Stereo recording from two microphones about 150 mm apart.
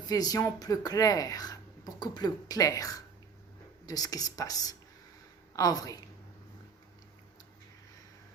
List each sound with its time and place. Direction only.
0.0 s speech: 25° left (ahead or behind)